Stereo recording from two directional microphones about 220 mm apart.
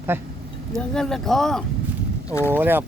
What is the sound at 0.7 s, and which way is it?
Speech, 5° left (ahead or behind).